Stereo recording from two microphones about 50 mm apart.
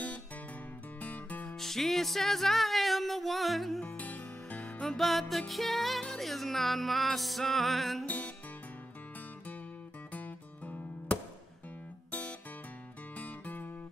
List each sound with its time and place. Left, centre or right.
1.0 s music: left
1.6 s music: centre
3.8 s music: left
4.8 s music: centre
10.1 s music: left